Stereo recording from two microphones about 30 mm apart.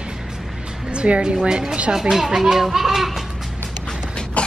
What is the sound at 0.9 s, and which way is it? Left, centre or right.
Speech, right.